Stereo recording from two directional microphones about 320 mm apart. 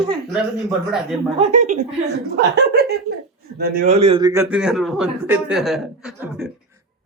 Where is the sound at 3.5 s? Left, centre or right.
Right; by 6.5 s centre.